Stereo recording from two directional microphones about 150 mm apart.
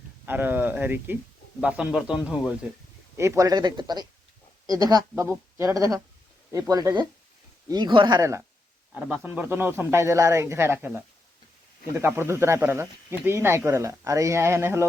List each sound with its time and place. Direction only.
0.3 s speech: 15° right (ahead or behind)
3.2 s speech: 20° right (ahead or behind)
8.9 s speech: 5° right (ahead or behind)